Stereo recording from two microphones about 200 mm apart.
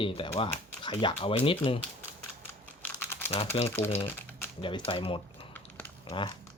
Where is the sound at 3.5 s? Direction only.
25° left (ahead or behind).